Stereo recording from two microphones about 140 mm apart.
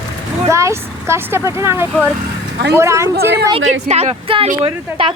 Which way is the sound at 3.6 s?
55° right (ahead or behind).